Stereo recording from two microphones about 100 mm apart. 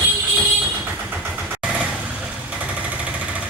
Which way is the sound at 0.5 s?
15° right (ahead or behind).